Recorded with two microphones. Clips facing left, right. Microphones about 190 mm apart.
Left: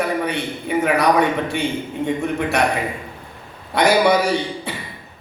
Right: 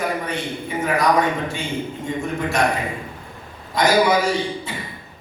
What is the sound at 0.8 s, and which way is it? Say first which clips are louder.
A man's voice: left 1 dB; 65° left (ahead or behind).